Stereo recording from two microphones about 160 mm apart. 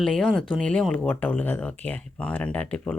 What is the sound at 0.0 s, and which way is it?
A woman's voice, 5° left (ahead or behind).